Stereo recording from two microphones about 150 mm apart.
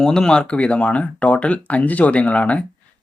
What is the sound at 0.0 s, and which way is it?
Speech, 5° left (ahead or behind).